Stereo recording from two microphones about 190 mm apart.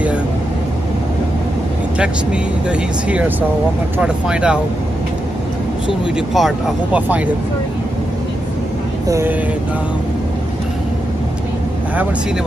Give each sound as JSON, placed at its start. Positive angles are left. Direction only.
{"t": 2.7, "sound": "speech", "side_deg": -5}
{"t": 6.3, "sound": "speech", "side_deg": -5}
{"t": 9.0, "sound": "speech", "side_deg": -15}